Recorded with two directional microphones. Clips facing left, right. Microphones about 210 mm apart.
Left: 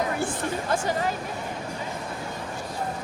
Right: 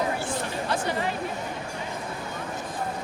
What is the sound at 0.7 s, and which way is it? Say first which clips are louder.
Speech: left 1 dB; 45° left (ahead or behind).